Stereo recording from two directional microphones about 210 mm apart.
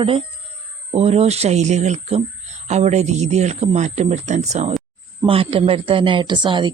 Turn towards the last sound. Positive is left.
turn(degrees=-20)  # may be behind; listen again after turning